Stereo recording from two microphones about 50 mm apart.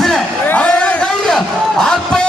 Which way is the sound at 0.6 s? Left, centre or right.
Left.